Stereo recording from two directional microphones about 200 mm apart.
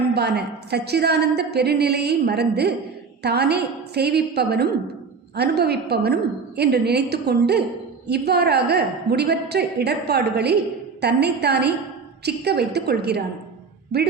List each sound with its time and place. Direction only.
0.1 s a woman's voice: 55° right (ahead or behind)